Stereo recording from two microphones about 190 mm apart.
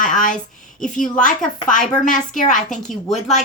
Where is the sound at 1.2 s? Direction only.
45° left (ahead or behind).